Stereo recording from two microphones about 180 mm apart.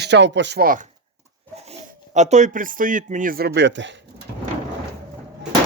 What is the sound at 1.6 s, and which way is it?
Speech, 40° right (ahead or behind).